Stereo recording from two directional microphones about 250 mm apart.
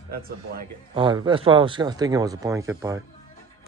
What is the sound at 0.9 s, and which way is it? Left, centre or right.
Speech, centre.